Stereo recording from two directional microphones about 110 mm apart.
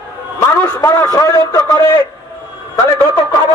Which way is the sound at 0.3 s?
25° left (ahead or behind).